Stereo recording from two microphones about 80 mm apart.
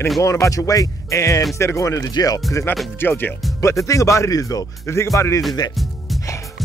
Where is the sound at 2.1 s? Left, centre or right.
Left.